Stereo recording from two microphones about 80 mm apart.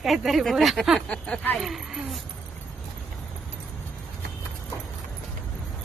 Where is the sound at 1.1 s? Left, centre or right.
Centre.